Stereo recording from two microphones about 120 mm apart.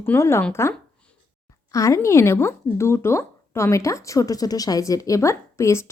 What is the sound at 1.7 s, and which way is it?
Speech, 25° left (ahead or behind).